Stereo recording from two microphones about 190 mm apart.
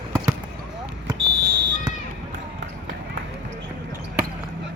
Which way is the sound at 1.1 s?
65° right (ahead or behind).